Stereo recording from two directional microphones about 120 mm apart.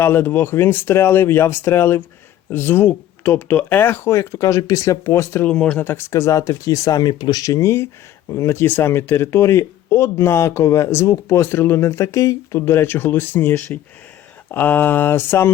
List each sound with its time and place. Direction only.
0.0 s speech: 20° left (ahead or behind)
5.5 s speech: 10° left (ahead or behind)